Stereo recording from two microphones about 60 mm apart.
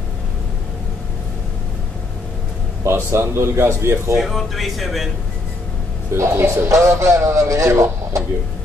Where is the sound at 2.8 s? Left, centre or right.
Right.